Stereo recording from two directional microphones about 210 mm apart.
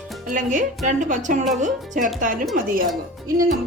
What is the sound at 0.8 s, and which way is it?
Speech, 35° right (ahead or behind).